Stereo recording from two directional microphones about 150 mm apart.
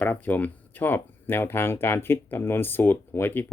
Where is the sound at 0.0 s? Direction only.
10° left (ahead or behind).